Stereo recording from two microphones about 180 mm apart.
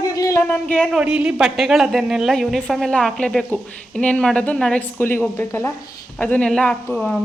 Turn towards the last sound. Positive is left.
turn(degrees=0)  # may be behind; listen again after turning